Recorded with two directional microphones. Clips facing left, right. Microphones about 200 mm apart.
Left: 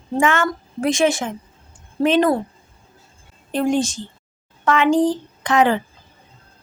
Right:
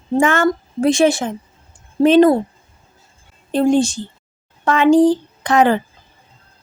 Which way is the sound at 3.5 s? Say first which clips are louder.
Right 5 dB; 30° right (ahead or behind).